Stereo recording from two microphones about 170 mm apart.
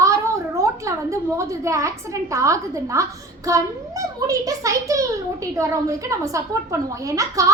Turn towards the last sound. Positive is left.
turn(degrees=-20)  # may be behind; listen again after turning